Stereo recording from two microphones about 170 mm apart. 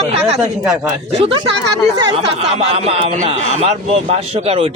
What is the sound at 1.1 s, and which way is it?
A man's voice, 30° right (ahead or behind).